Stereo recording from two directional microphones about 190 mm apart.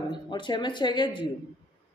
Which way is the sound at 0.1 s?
25° left (ahead or behind).